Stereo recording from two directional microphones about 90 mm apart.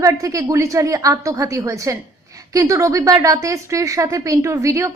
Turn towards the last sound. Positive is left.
turn(degrees=-35)  # may be behind; listen again after turning